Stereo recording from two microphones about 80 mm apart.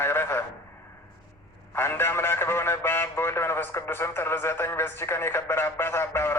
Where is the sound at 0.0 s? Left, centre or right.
Left.